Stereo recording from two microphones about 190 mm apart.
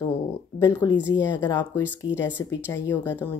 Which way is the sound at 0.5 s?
15° left (ahead or behind).